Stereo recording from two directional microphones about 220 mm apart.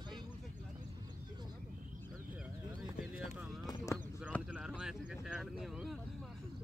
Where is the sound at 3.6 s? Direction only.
15° left (ahead or behind).